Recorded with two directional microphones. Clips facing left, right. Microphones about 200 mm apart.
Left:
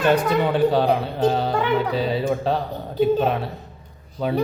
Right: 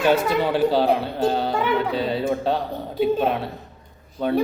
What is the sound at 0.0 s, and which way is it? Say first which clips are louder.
Speech: left 1 dB; 5° right (ahead or behind).